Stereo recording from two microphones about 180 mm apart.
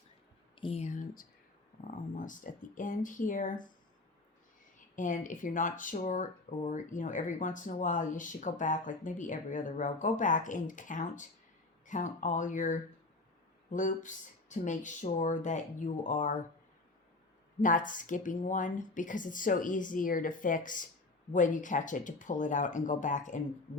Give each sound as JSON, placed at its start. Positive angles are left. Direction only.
{"t": 0.5, "sound": "speech", "side_deg": 30}
{"t": 4.9, "sound": "speech", "side_deg": 45}
{"t": 17.6, "sound": "speech", "side_deg": 45}